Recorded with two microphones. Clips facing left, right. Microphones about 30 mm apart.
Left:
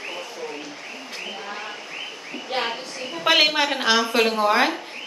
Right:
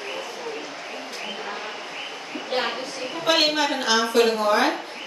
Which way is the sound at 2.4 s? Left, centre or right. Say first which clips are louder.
Even; centre.